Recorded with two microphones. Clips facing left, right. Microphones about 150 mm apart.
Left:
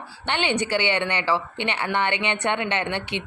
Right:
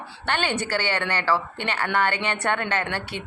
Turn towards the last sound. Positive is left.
turn(degrees=20)  # may be behind; listen again after turning